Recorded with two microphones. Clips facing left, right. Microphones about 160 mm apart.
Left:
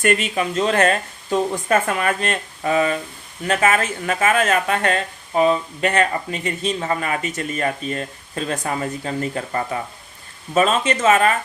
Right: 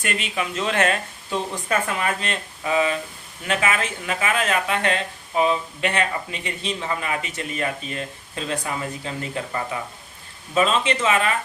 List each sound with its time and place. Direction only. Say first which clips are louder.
0.0 s speech: left 7 dB; 50° left (ahead or behind)